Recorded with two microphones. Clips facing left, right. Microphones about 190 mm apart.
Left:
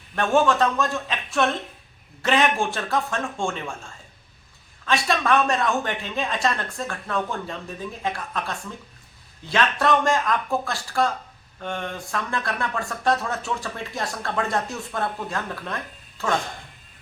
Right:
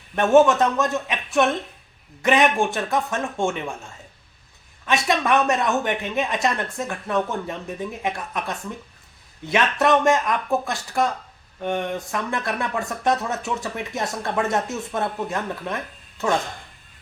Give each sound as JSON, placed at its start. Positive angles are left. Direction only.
{"t": 0.2, "sound": "speech", "side_deg": -20}
{"t": 4.9, "sound": "speech", "side_deg": -20}